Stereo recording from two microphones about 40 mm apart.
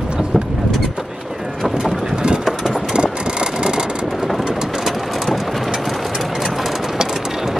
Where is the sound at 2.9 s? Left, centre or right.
Right.